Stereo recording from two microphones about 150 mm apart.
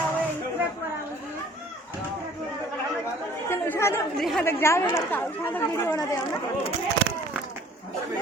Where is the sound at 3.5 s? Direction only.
15° left (ahead or behind).